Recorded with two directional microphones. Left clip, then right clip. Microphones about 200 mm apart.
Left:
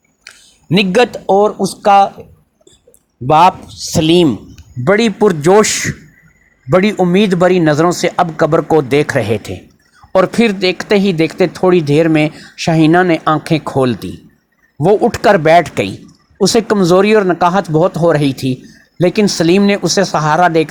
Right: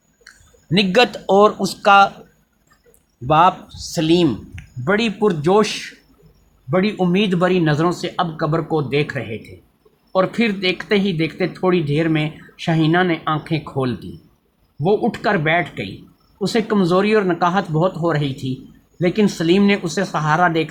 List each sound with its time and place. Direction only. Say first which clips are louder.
0.3 s speech: left 7 dB; 25° left (ahead or behind)
3.2 s speech: left 5 dB; 25° left (ahead or behind)